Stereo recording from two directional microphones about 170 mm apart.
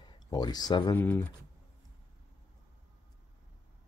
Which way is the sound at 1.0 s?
10° left (ahead or behind).